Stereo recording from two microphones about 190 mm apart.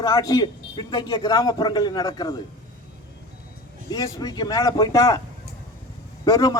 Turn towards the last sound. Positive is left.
turn(degrees=20)  # may be behind; listen again after turning